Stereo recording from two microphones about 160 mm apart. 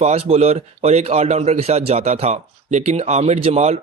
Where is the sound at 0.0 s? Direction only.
40° right (ahead or behind).